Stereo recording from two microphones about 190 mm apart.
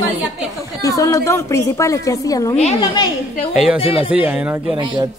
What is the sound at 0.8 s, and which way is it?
A woman's voice, 15° left (ahead or behind).